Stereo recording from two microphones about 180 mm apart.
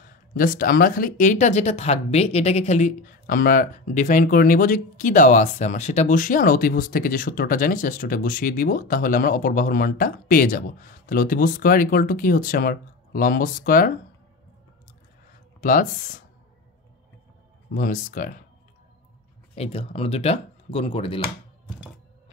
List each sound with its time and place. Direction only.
0.3 s speech: 50° left (ahead or behind)
15.6 s speech: 45° left (ahead or behind)
17.7 s speech: 45° left (ahead or behind)
19.5 s speech: 35° left (ahead or behind)